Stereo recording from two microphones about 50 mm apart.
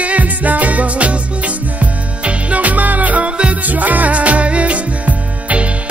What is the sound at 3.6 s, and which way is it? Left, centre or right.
Music, right.